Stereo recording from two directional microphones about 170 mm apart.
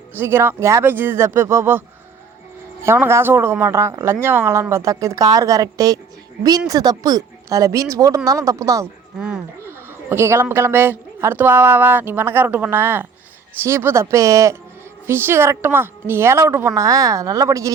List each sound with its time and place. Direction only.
0.2 s speech: 15° right (ahead or behind)
2.8 s speech: 15° right (ahead or behind)